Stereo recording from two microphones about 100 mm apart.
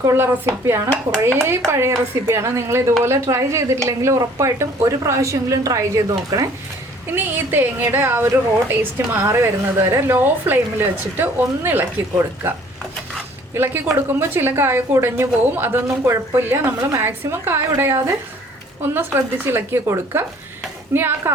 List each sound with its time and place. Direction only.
0.0 s a woman's voice: 25° right (ahead or behind)
7.3 s a woman's voice: 20° right (ahead or behind)